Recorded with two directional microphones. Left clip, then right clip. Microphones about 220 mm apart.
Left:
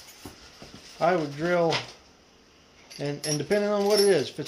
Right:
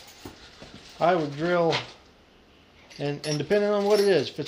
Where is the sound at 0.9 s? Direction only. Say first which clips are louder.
Right 1 dB; 5° right (ahead or behind).